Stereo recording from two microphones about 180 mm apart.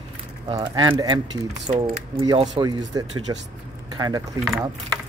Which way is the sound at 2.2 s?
25° right (ahead or behind).